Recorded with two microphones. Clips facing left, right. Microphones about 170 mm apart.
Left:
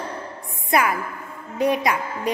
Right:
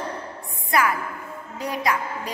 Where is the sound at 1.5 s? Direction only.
20° left (ahead or behind).